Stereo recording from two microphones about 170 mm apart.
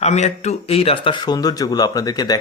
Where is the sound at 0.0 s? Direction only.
40° left (ahead or behind).